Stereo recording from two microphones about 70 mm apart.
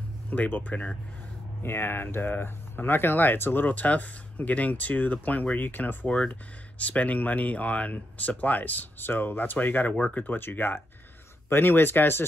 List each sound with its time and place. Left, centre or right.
0.3 s speech: left
1.6 s speech: left
6.0 s speech: centre; by 12.3 s left